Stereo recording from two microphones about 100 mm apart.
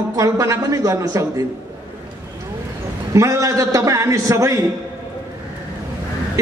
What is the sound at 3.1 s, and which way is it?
A man's voice, 30° right (ahead or behind).